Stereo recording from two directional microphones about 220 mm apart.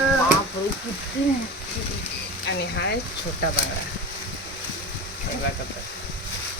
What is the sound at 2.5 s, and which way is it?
Speech, 50° left (ahead or behind).